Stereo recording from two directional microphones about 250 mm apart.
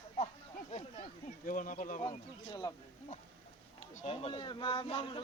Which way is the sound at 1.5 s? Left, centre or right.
Left.